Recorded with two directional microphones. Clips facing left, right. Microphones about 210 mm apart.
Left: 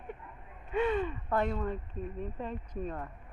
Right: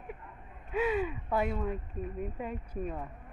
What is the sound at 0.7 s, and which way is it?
Speech, 5° right (ahead or behind).